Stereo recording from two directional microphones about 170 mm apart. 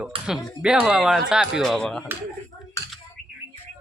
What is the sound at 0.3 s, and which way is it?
Speech, 5° right (ahead or behind).